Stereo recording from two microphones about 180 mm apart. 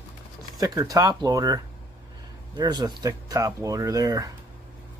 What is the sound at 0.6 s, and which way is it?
Speech, 20° right (ahead or behind).